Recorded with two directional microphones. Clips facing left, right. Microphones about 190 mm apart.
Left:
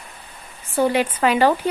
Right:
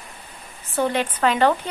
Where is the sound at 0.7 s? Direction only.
10° left (ahead or behind).